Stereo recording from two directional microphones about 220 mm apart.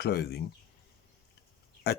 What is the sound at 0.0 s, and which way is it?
Speech, 45° left (ahead or behind).